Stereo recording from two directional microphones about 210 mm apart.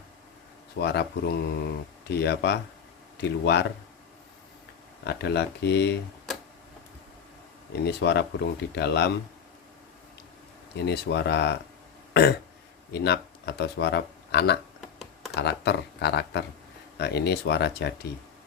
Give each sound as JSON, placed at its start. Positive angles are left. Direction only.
{"t": 0.8, "sound": "speech", "side_deg": 55}
{"t": 5.0, "sound": "speech", "side_deg": 50}
{"t": 7.9, "sound": "speech", "side_deg": 55}
{"t": 10.8, "sound": "speech", "side_deg": 50}
{"t": 12.9, "sound": "speech", "side_deg": 50}
{"t": 14.8, "sound": "computer keyboard", "side_deg": 0}
{"t": 15.4, "sound": "speech", "side_deg": 55}